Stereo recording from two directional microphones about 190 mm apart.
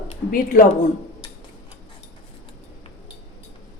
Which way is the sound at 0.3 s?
45° left (ahead or behind).